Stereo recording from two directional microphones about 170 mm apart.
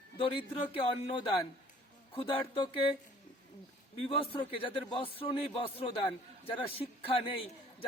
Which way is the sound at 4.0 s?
30° left (ahead or behind).